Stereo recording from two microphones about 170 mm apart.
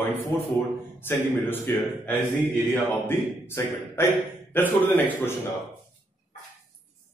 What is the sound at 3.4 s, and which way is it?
A man's voice, 15° left (ahead or behind).